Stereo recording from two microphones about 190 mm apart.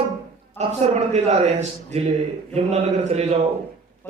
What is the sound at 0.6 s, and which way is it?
A man's voice, 35° right (ahead or behind).